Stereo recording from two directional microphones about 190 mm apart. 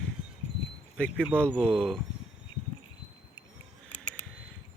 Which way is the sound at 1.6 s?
5° left (ahead or behind).